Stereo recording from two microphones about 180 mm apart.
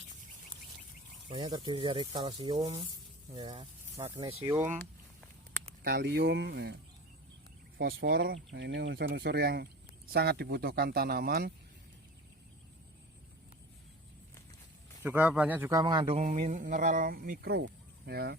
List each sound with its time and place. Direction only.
1.3 s speech: 25° right (ahead or behind)
5.8 s speech: 60° right (ahead or behind)
7.8 s speech: 55° right (ahead or behind)
15.0 s speech: 10° right (ahead or behind)
15.8 s speech: 25° right (ahead or behind); by 18.3 s 65° right (ahead or behind)